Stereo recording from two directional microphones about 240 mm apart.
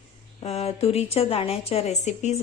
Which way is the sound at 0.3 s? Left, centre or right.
Left.